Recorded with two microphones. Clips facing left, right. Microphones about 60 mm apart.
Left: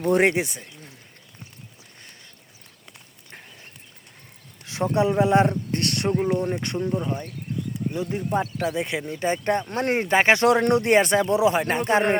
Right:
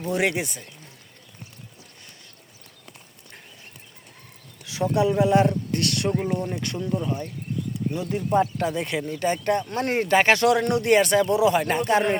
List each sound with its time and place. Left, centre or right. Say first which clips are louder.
0.2 s speech: left 4 dB; left
4.6 s speech: even; left
8.3 s speech: right 5 dB; centre; by 12.1 s left